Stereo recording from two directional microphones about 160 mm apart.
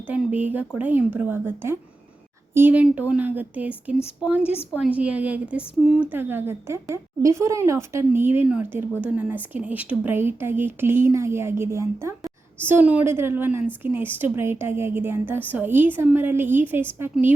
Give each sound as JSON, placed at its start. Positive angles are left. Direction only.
{"t": 0.1, "sound": "a woman's voice", "side_deg": -10}